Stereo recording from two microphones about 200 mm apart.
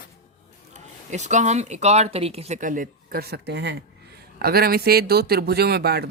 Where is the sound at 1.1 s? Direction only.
35° right (ahead or behind).